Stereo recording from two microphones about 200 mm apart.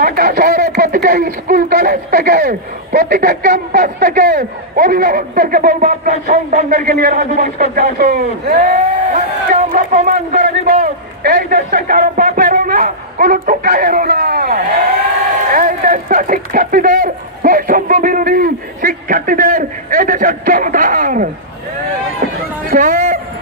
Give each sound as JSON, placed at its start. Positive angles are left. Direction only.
{"t": 0.0, "sound": "speech", "side_deg": -55}
{"t": 0.5, "sound": "a sound", "side_deg": -35}
{"t": 0.9, "sound": "speech", "side_deg": -40}
{"t": 2.4, "sound": "speech", "side_deg": -55}
{"t": 22.2, "sound": "run", "side_deg": -45}
{"t": 22.7, "sound": "speech", "side_deg": -35}